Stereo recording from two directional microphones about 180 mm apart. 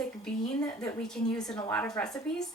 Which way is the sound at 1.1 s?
5° left (ahead or behind).